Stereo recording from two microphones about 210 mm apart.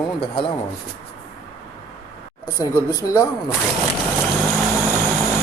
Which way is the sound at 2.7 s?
15° left (ahead or behind).